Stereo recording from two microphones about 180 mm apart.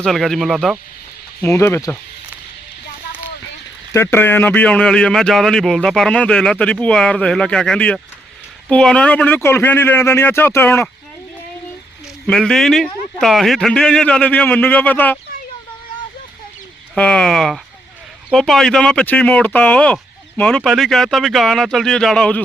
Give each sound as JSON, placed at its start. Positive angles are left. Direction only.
{"t": 0.0, "sound": "speech", "side_deg": 0}
{"t": 1.4, "sound": "speech", "side_deg": 15}
{"t": 3.9, "sound": "speech", "side_deg": 15}
{"t": 12.2, "sound": "speech", "side_deg": 5}
{"t": 16.9, "sound": "speech", "side_deg": 5}